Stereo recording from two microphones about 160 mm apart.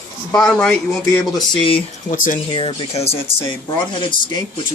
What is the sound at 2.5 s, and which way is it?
Speech, 35° left (ahead or behind).